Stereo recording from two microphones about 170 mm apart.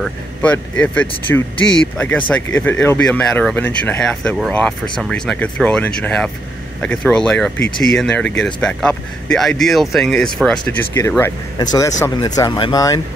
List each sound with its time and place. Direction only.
0.0 s speech: 5° left (ahead or behind)
11.0 s speech: 15° left (ahead or behind)